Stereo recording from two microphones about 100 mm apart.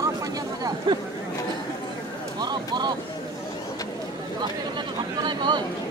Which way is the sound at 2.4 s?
45° right (ahead or behind).